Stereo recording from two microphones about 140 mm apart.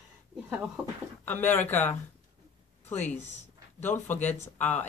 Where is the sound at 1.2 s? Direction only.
15° left (ahead or behind).